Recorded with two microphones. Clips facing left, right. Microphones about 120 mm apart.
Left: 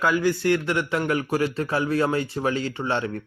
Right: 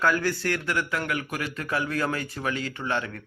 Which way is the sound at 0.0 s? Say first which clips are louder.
Left 3 dB; 15° left (ahead or behind).